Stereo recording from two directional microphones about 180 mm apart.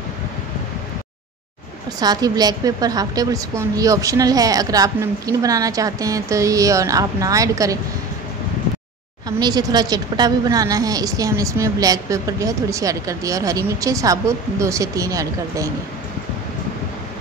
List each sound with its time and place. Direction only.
2.0 s a woman's voice: 20° right (ahead or behind)
9.4 s a woman's voice: 20° right (ahead or behind)